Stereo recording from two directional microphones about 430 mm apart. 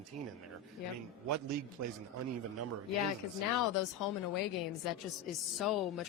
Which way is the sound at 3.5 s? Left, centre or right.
Left.